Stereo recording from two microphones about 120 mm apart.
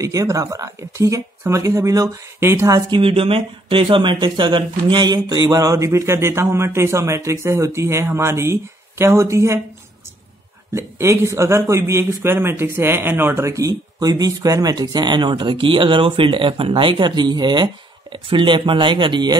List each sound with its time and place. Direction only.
0.0 s speech: 30° right (ahead or behind)
2.9 s speech: 50° right (ahead or behind); by 9.6 s 25° right (ahead or behind)
10.7 s speech: 25° right (ahead or behind); by 19.3 s 40° right (ahead or behind)